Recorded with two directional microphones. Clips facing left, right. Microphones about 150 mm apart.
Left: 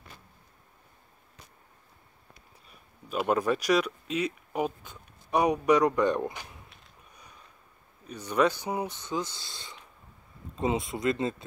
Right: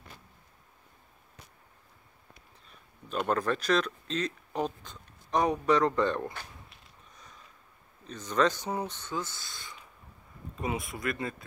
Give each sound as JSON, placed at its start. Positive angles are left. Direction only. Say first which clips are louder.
{"t": 3.1, "sound": "speech", "louder": "left 3 dB", "side_deg": 10}
{"t": 8.1, "sound": "speech", "louder": "left 2 dB", "side_deg": 10}